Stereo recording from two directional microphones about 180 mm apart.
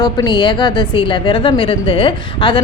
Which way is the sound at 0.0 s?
20° left (ahead or behind).